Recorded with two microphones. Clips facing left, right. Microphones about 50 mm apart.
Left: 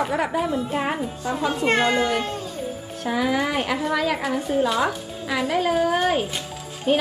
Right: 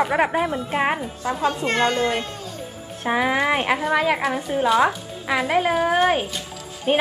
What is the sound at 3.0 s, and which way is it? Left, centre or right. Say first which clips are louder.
A woman's voice: right 2 dB; right.